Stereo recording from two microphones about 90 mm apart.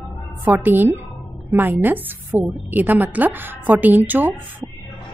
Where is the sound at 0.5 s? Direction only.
20° right (ahead or behind).